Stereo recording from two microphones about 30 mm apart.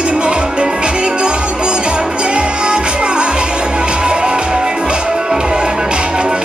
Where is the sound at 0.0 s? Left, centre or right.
Right.